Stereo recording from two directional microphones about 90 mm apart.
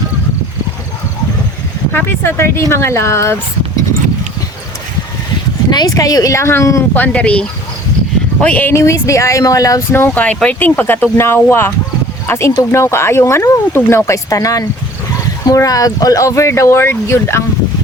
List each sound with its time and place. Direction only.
1.9 s speech: 25° left (ahead or behind)
5.7 s speech: 45° left (ahead or behind)
6.9 s speech: 20° left (ahead or behind)
8.7 s speech: 35° left (ahead or behind)
9.9 s speech: 20° left (ahead or behind)